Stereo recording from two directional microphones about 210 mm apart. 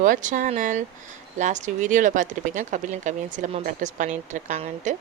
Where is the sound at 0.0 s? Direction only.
40° right (ahead or behind).